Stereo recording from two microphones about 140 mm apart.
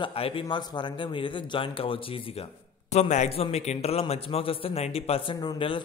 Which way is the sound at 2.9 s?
55° left (ahead or behind).